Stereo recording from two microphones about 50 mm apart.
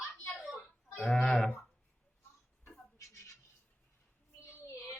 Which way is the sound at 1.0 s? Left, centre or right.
Centre.